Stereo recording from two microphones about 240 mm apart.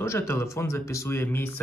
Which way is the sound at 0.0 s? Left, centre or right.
Centre.